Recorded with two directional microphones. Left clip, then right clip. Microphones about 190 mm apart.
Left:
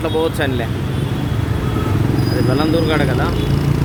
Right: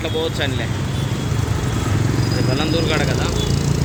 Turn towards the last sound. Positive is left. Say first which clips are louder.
# left 3 dB
turn(degrees=30)  # may be behind; listen again after turning